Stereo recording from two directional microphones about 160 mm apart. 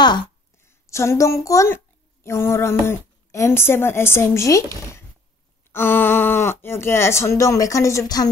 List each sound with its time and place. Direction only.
0.7 s a woman's voice: 15° left (ahead or behind)
5.7 s speech: 15° left (ahead or behind)